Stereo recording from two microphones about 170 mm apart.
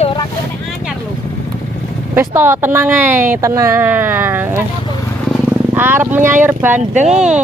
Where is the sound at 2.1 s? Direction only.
15° right (ahead or behind).